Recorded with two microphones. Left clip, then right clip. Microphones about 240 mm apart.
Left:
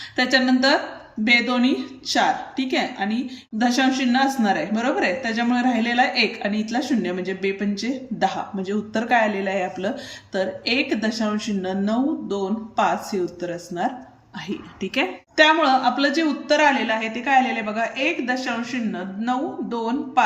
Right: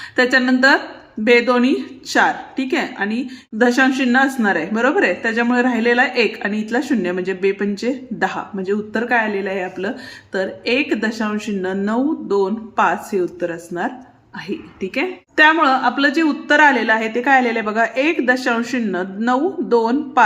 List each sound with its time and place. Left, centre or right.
0.2 s a woman's voice: centre